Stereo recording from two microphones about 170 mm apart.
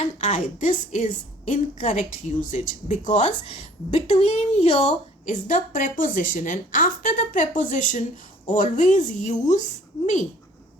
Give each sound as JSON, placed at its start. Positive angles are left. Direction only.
{"t": 0.0, "sound": "a woman's voice", "side_deg": 45}